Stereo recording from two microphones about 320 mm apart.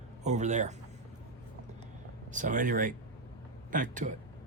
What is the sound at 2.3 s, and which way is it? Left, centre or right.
Speech, right.